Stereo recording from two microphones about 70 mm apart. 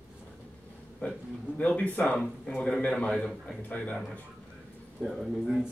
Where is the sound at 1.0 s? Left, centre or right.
Left.